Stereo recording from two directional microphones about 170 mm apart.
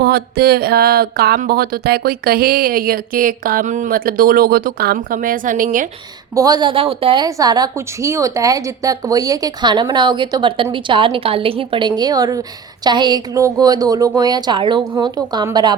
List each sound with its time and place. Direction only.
0.0 s speech: 65° right (ahead or behind); by 5.9 s 50° right (ahead or behind)
6.3 s a woman's voice: 20° right (ahead or behind)